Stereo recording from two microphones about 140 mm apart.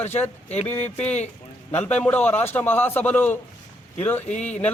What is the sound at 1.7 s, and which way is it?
A man's voice, 15° left (ahead or behind).